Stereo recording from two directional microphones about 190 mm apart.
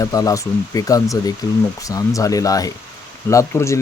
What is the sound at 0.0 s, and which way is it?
Speech, 20° left (ahead or behind).